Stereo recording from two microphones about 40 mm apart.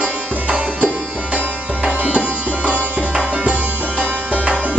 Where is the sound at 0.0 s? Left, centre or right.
Right.